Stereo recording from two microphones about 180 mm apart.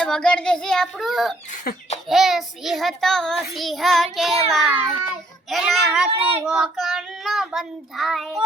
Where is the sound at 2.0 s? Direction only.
Centre (ahead or behind).